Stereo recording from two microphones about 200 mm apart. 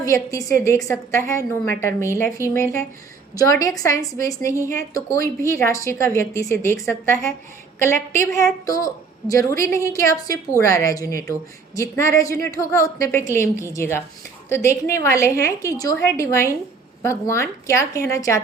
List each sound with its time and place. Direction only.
0.0 s a woman's voice: 15° left (ahead or behind)